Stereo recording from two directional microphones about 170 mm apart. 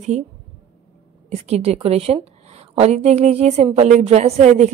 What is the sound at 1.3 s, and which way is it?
A woman's voice, 40° right (ahead or behind).